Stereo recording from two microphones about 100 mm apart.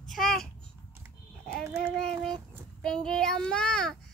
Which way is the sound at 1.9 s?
5° left (ahead or behind).